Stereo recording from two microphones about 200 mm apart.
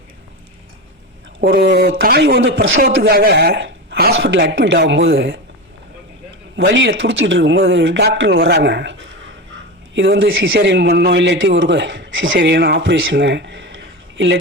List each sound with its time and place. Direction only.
1.4 s a man's voice: 50° right (ahead or behind)
4.1 s a man's voice: 65° right (ahead or behind)
6.6 s a man's voice: 60° right (ahead or behind)